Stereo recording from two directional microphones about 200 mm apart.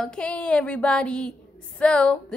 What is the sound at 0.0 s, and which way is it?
A woman's voice, 5° left (ahead or behind).